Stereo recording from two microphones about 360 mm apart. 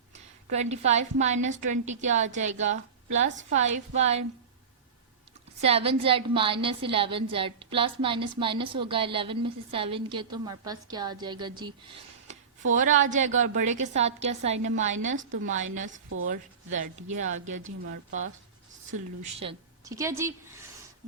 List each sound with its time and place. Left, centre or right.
0.1 s a woman's voice: centre
5.6 s a woman's voice: centre
15.1 s a woman's voice: right
15.4 s a woman's voice: centre
19.2 s a woman's voice: centre